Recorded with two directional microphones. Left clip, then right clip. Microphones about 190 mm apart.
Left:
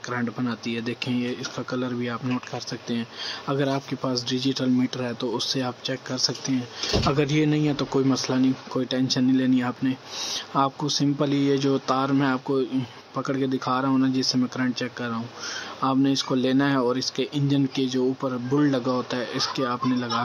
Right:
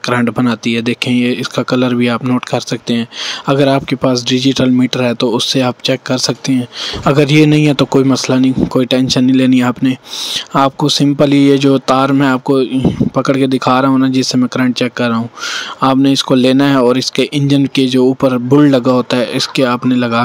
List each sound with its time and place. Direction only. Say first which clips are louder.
0.1 s speech: right 15 dB; 45° right (ahead or behind)